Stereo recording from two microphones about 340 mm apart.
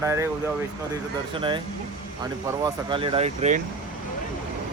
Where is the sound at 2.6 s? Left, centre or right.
Centre.